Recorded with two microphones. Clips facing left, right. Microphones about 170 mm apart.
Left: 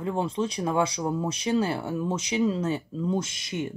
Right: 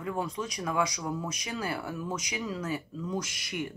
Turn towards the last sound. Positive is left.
turn(degrees=25)  # may be behind; listen again after turning